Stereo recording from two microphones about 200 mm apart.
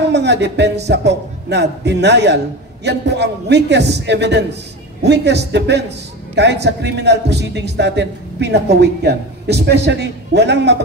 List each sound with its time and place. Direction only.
0.1 s music: 60° right (ahead or behind)
0.8 s a man's voice: 60° right (ahead or behind)